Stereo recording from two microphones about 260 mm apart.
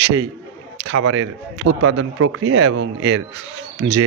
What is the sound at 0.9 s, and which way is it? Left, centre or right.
Speech, right.